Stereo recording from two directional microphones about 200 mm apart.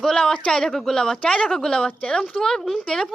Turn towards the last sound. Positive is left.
turn(degrees=0)  # may be behind; listen again after turning